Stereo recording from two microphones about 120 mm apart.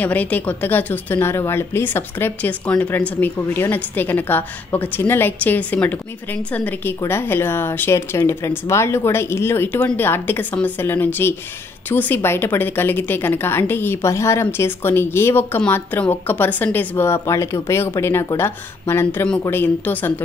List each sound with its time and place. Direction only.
0.0 s a woman's voice: 15° left (ahead or behind)